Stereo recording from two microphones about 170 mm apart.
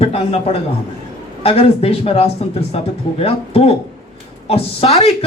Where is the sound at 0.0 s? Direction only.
35° left (ahead or behind).